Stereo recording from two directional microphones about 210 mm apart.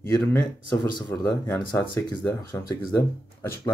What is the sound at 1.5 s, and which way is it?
Speech, 20° left (ahead or behind).